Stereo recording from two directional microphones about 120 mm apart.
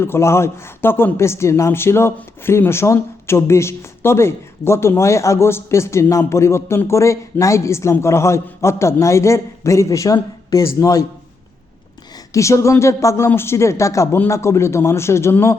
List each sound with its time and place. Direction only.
0.0 s speech: 20° left (ahead or behind)
12.3 s speech: 25° left (ahead or behind)